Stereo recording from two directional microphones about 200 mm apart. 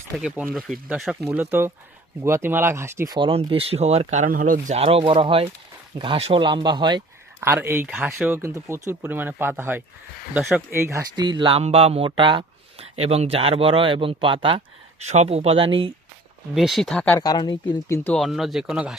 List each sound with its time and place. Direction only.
0.2 s speech: 5° right (ahead or behind)
3.2 s speech: 25° right (ahead or behind)
16.6 s speech: centre (ahead or behind)
17.2 s speech: 20° left (ahead or behind); by 18.9 s 5° right (ahead or behind)